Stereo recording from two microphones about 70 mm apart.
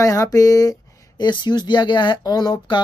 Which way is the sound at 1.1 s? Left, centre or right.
Left.